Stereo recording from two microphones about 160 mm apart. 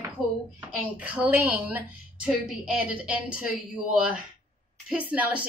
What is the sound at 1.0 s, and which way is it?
A woman's voice, 10° right (ahead or behind).